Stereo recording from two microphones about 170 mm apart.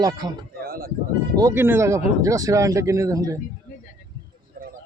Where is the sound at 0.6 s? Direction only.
60° right (ahead or behind).